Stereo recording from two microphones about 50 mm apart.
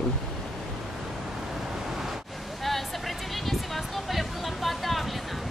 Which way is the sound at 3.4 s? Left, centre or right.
Centre.